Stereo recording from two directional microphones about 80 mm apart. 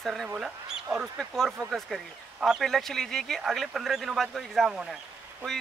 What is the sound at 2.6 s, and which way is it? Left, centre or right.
Speech, centre.